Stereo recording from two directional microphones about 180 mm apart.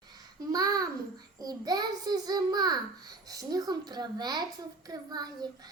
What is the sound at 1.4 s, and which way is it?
A child's voice, 20° right (ahead or behind).